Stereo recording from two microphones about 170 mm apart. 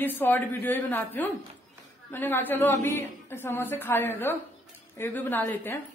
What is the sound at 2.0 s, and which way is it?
A woman's voice, 10° left (ahead or behind).